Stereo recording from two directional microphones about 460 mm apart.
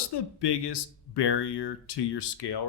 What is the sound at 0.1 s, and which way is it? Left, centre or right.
Speech, left.